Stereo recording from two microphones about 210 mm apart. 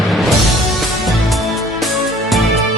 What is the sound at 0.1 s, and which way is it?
Music, centre (ahead or behind).